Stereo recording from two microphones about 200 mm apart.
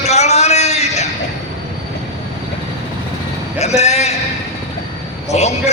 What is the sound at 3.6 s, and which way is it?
Speech, 35° left (ahead or behind).